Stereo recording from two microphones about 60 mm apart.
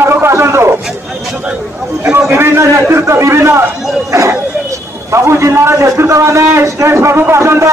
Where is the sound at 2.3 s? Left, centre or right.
Right.